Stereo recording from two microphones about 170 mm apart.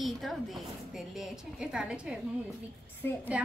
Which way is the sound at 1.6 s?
5° right (ahead or behind).